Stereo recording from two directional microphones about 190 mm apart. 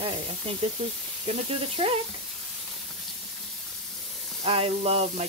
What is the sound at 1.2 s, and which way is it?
Speech, 30° right (ahead or behind).